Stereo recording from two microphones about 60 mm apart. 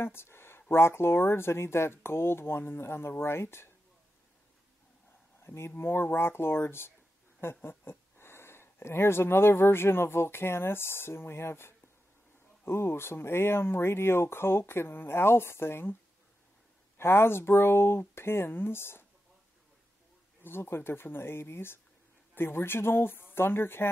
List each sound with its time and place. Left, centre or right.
0.0 s speech: left
5.4 s a sound: left
5.8 s speech: left
20.4 s speech: left